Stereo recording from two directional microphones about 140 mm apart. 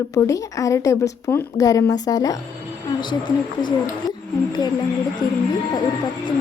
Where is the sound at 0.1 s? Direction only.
20° left (ahead or behind).